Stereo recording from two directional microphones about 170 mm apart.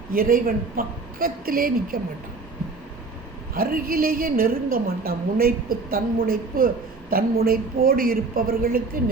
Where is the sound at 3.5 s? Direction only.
60° right (ahead or behind).